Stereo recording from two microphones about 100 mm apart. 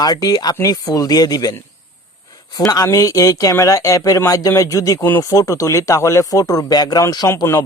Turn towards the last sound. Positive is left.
turn(degrees=30)  # may be behind; listen again after turning